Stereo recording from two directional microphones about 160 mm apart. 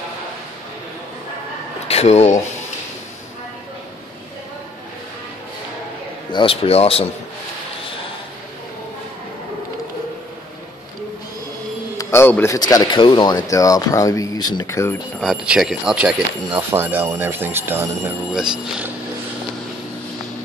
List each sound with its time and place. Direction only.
1.9 s speech: 40° left (ahead or behind)
6.3 s speech: 35° left (ahead or behind)
12.0 s a man's voice: 15° left (ahead or behind)
12.5 s speech: 25° left (ahead or behind)
15.1 s speech: 5° right (ahead or behind)